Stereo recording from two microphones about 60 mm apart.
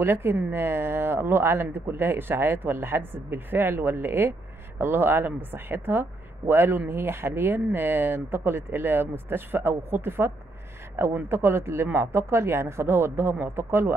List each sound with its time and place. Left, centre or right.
0.0 s speech: right